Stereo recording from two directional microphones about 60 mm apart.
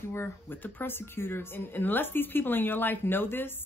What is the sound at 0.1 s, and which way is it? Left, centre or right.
A woman's voice, left.